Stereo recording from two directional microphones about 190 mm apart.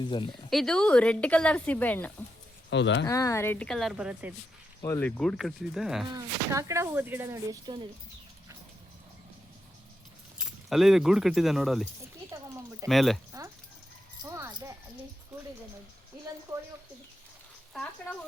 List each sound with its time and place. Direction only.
0.0 s speech: 25° left (ahead or behind)
0.5 s speech: 5° left (ahead or behind)
2.6 s speech: 70° left (ahead or behind)
3.1 s speech: 15° left (ahead or behind); by 4.4 s 5° right (ahead or behind)
4.8 s speech: 10° left (ahead or behind)
6.1 s speech: 15° right (ahead or behind)
10.3 s speech: centre (ahead or behind)
12.9 s speech: centre (ahead or behind)
13.3 s a child's voice: 15° right (ahead or behind)